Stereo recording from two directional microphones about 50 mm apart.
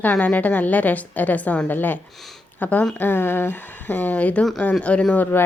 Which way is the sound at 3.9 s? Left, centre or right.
Left.